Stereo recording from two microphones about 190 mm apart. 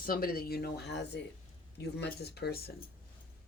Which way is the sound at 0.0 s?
50° left (ahead or behind).